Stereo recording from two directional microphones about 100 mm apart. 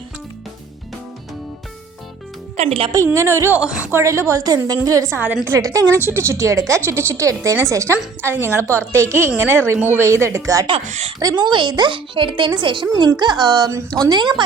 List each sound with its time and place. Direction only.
2.6 s a woman's voice: 75° right (ahead or behind)
2.9 s a woman's voice: 30° right (ahead or behind)
3.6 s a woman's voice: 10° right (ahead or behind)
3.9 s a woman's voice: 30° right (ahead or behind); by 14.4 s 50° right (ahead or behind)